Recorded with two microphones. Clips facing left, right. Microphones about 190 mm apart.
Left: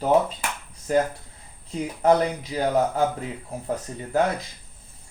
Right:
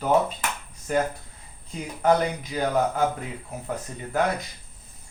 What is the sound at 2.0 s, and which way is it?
Speech, 30° left (ahead or behind).